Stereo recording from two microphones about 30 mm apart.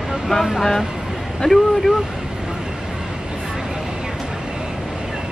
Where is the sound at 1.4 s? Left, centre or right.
Left.